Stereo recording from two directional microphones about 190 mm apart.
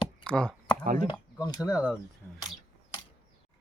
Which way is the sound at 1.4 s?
20° left (ahead or behind).